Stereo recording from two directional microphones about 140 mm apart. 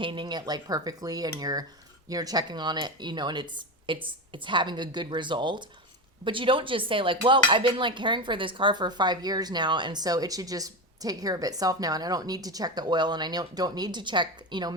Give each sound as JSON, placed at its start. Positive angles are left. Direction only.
{"t": 0.0, "sound": "speech", "side_deg": -35}